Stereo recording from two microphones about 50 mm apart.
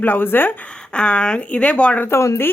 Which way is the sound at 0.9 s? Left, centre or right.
Centre.